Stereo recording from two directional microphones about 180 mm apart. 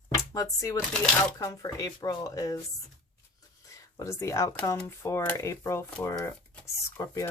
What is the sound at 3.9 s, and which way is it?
Speech, 15° left (ahead or behind).